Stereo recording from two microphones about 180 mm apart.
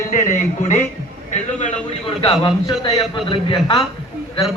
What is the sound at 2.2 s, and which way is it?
Speech, 25° left (ahead or behind).